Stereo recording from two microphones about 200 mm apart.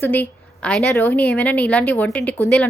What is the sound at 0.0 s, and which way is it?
A woman's voice, 10° left (ahead or behind).